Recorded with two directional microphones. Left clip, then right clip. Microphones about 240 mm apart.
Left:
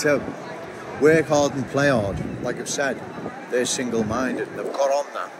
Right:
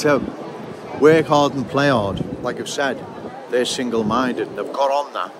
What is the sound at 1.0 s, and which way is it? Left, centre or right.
Speech, centre.